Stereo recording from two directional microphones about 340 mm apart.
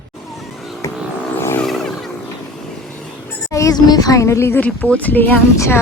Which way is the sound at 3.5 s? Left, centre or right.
Centre.